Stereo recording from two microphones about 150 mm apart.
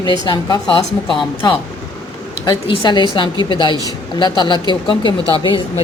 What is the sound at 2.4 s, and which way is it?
A woman's voice, 30° left (ahead or behind).